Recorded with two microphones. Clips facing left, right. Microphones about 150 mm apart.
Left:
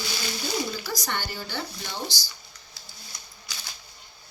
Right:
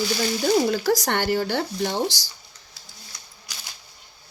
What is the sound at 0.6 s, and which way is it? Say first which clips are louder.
Speech: right 11 dB; 80° right.